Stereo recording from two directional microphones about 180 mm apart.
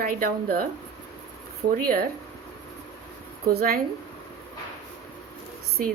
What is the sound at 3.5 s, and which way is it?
Speech, 55° right (ahead or behind).